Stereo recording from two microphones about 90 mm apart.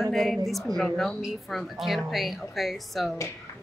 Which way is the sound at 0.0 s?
Centre (ahead or behind).